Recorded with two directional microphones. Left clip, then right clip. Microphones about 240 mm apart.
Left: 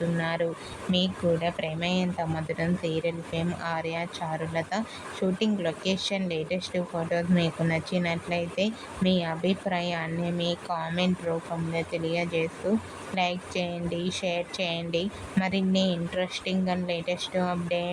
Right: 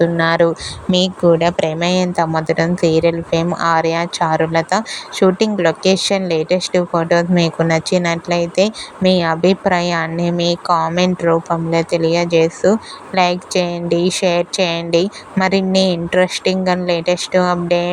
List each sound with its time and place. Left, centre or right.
0.2 s speech: right